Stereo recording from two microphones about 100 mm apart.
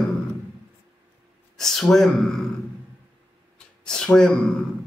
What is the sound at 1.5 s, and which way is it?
Speech, 5° left (ahead or behind).